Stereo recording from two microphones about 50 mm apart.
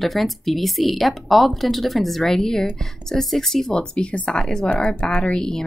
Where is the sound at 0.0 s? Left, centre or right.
Centre.